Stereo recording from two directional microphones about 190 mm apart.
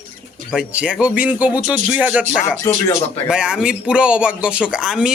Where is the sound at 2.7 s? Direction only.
20° left (ahead or behind).